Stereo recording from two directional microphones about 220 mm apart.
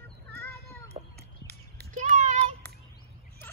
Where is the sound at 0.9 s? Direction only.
25° right (ahead or behind).